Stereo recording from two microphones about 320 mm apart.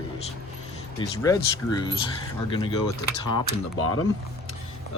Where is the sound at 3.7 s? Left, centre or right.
Left.